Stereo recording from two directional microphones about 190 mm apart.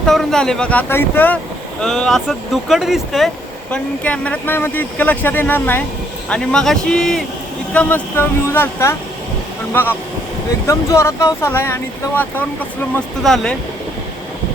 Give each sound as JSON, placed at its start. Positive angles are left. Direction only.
{"t": 0.0, "sound": "speech", "side_deg": 0}
{"t": 10.7, "sound": "speech", "side_deg": 15}